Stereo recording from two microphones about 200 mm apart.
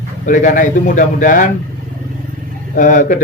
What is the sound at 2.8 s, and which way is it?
Speech, 40° left (ahead or behind).